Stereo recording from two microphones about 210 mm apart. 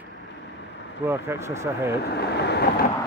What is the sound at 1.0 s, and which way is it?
Speech, 10° right (ahead or behind).